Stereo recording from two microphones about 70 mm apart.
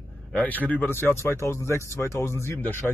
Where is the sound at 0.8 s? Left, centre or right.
Left.